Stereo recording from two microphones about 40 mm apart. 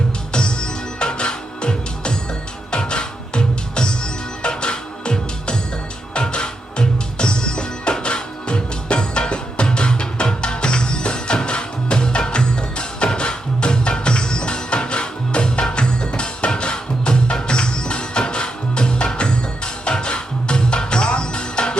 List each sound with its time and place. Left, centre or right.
0.3 s music: left